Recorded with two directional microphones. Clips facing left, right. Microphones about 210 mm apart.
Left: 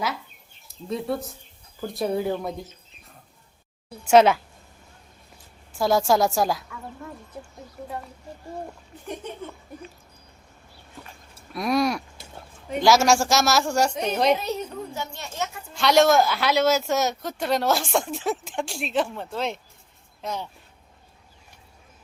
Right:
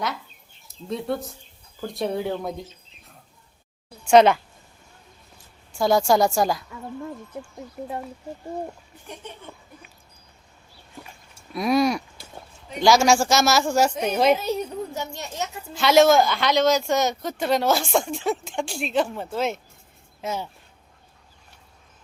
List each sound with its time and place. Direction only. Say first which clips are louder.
0.9 s speech: even; centre (ahead or behind)
4.0 s speech: right 1 dB; 5° left (ahead or behind)
5.7 s speech: right 1 dB; centre (ahead or behind)
7.3 s speech: right 4 dB; 20° right (ahead or behind)
11.5 s a sound: right 2 dB; centre (ahead or behind)
12.8 s speech: right 1 dB; centre (ahead or behind)
14.9 s a child's voice: right 1 dB; 15° right (ahead or behind)
15.7 s speech: right 2 dB; centre (ahead or behind)